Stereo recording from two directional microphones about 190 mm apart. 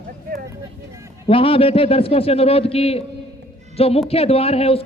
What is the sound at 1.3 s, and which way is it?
A man's voice, 30° left (ahead or behind).